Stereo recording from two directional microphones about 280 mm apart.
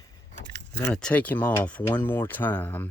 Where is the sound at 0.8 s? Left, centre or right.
Centre.